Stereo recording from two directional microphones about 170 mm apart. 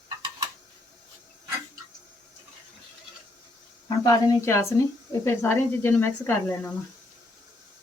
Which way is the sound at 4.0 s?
15° left (ahead or behind).